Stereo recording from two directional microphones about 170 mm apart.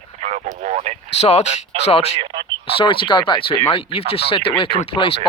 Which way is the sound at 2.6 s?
30° left (ahead or behind).